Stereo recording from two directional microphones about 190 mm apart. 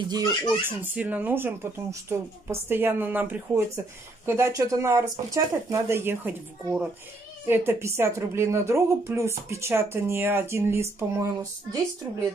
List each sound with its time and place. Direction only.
0.1 s speech: 20° right (ahead or behind)